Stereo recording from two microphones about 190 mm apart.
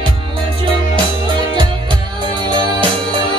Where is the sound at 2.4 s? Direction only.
25° right (ahead or behind).